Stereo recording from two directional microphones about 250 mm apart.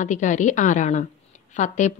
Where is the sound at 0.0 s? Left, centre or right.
Left.